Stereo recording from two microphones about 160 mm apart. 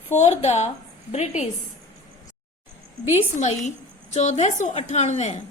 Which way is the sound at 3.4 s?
50° left (ahead or behind).